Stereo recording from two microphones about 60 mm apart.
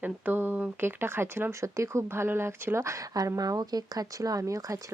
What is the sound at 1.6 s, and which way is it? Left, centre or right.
Speech, right.